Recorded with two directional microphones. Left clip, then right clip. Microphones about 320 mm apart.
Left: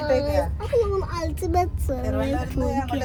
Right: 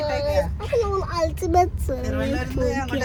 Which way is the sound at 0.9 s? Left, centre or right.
Centre.